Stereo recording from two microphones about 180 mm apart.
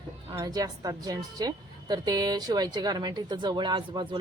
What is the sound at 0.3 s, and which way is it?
A woman's voice, 20° right (ahead or behind).